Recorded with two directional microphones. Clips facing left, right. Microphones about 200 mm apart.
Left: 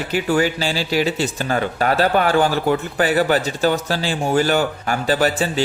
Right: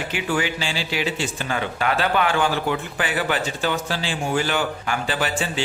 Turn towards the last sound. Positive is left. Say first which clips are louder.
# left 6 dB
turn(degrees=40)  # may be behind; listen again after turning